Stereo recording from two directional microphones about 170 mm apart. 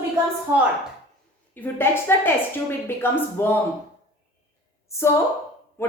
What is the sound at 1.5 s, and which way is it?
A man's voice, 10° left (ahead or behind).